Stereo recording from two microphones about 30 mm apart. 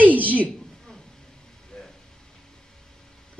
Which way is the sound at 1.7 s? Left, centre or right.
Left.